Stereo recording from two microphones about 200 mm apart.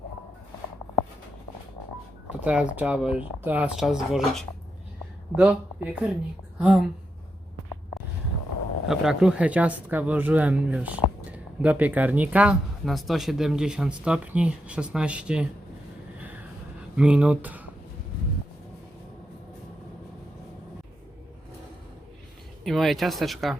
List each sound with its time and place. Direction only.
2.4 s speech: 5° right (ahead or behind)
5.4 s speech: 5° right (ahead or behind)
8.9 s speech: 5° right (ahead or behind)
16.1 s vehicle: 10° right (ahead or behind)
17.0 s speech: 5° right (ahead or behind)
22.6 s speech: centre (ahead or behind)